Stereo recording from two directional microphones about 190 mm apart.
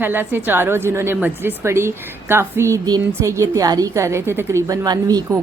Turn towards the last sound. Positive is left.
turn(degrees=-20)  # may be behind; listen again after turning